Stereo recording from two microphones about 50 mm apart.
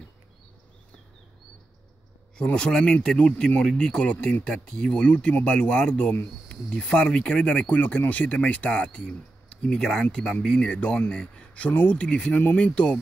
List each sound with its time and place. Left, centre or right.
2.3 s speech: centre
4.5 s speech: centre
7.6 s speech: left